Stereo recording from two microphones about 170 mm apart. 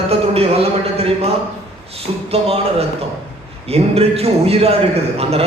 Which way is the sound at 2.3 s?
35° right (ahead or behind).